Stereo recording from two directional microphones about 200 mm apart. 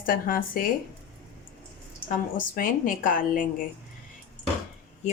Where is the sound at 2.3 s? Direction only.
40° left (ahead or behind).